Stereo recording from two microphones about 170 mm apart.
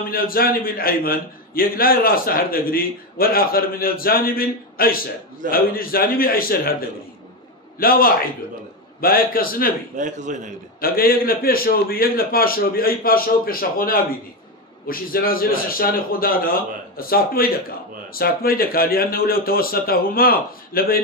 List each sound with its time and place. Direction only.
0.1 s a man's voice: 60° left (ahead or behind)
7.8 s a man's voice: 60° left (ahead or behind)
9.9 s a man's voice: 45° right (ahead or behind)
10.8 s a man's voice: 60° left (ahead or behind)